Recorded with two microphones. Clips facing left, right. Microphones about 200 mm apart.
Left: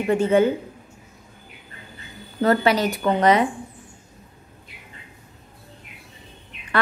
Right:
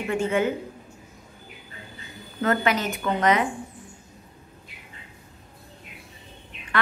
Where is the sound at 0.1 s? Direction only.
35° left (ahead or behind).